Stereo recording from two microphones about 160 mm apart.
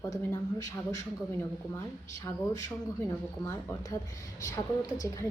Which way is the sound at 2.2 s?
20° left (ahead or behind).